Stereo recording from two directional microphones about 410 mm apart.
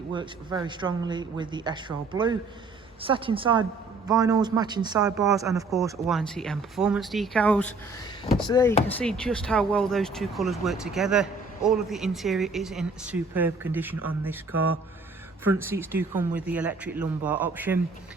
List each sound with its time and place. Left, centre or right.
0.1 s speech: centre
14.5 s speech: right
15.4 s speech: centre